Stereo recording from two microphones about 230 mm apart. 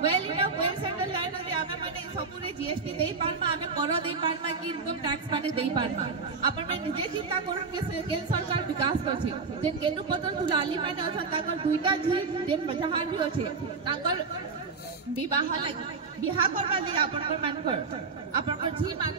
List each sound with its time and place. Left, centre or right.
0.3 s music: right
3.3 s a sound: right
8.3 s a woman's voice: centre
15.2 s a woman's voice: centre